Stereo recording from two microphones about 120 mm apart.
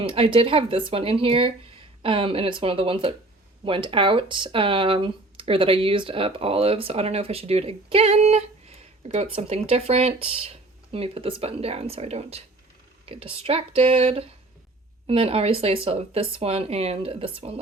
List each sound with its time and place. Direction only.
0.0 s speech: 45° right (ahead or behind)